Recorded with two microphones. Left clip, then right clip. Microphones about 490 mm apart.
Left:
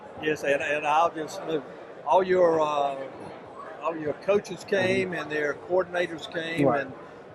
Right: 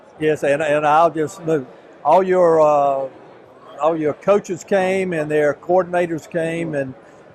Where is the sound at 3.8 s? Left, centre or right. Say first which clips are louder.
Right 12 dB; right.